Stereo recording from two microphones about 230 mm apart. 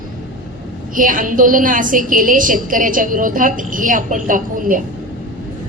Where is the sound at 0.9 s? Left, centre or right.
Right.